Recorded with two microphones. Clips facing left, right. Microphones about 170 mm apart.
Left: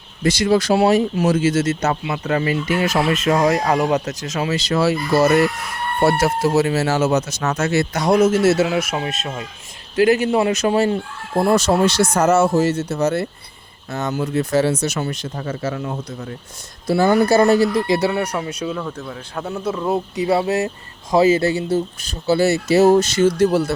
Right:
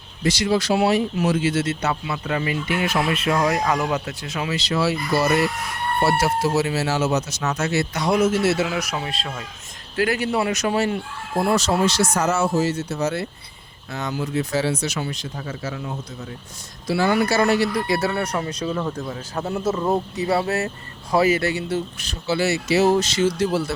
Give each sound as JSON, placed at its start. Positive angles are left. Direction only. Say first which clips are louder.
{"t": 0.2, "sound": "speech", "louder": "left 4 dB", "side_deg": 50}
{"t": 8.7, "sound": "speech", "louder": "left 5 dB", "side_deg": 25}
{"t": 11.7, "sound": "speech", "louder": "left 4 dB", "side_deg": 55}
{"t": 17.7, "sound": "speech", "louder": "left 4 dB", "side_deg": 20}
{"t": 18.8, "sound": "speech", "louder": "right 1 dB", "side_deg": -15}
{"t": 20.1, "sound": "speech", "louder": "left 4 dB", "side_deg": 15}
{"t": 22.3, "sound": "speech", "louder": "left 5 dB", "side_deg": 40}